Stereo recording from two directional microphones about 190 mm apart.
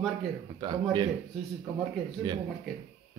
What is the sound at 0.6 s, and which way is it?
Speech, 25° right (ahead or behind).